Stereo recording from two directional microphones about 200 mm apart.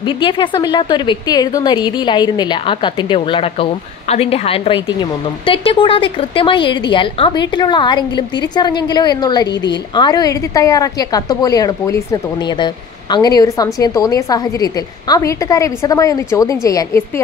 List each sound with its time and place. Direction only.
0.0 s a woman's voice: 25° left (ahead or behind)